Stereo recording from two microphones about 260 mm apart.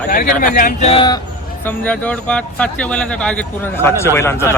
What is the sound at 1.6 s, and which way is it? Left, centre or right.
Speech, centre.